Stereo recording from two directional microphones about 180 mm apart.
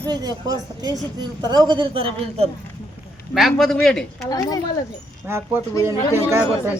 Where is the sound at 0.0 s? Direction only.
20° right (ahead or behind).